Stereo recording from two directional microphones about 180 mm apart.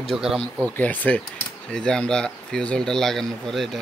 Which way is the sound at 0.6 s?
10° left (ahead or behind).